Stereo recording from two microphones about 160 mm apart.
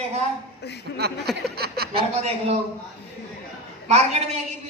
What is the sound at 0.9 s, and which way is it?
Speech, 85° right.